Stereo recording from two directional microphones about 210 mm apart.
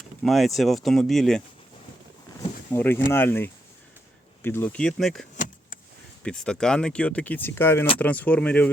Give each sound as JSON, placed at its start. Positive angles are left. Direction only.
{"t": 0.2, "sound": "speech", "side_deg": 0}
{"t": 2.7, "sound": "speech", "side_deg": 10}
{"t": 6.2, "sound": "speech", "side_deg": 5}